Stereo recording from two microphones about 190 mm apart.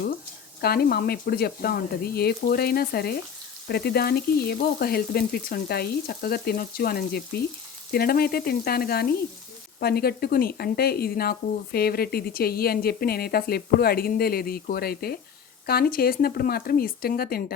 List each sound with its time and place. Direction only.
0.6 s speech: 55° left (ahead or behind)